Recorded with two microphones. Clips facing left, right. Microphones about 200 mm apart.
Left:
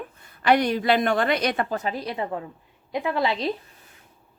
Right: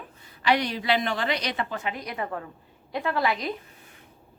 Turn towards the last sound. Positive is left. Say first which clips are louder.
# left 2 dB
turn(degrees=25)  # may be behind; listen again after turning